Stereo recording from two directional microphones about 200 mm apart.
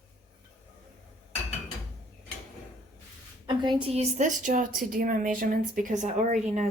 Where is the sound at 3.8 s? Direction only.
30° right (ahead or behind).